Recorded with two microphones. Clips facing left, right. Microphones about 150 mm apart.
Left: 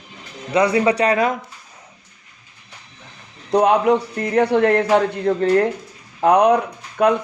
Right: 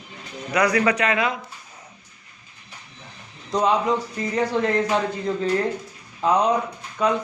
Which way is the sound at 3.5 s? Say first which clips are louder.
Left 6 dB; 60° left (ahead or behind).